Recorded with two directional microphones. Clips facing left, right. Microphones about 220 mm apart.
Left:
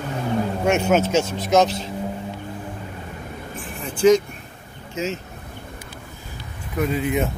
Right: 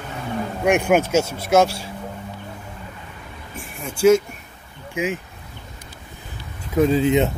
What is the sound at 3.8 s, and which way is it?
Speech, 10° right (ahead or behind).